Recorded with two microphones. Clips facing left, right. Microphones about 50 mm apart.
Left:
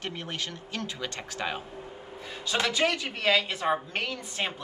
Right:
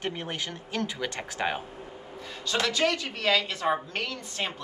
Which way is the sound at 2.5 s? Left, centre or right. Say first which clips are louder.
Even; centre.